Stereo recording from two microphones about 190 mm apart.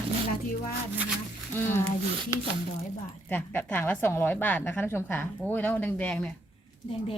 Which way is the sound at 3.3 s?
10° left (ahead or behind).